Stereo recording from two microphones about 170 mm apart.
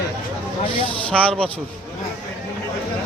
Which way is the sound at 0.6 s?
30° left (ahead or behind).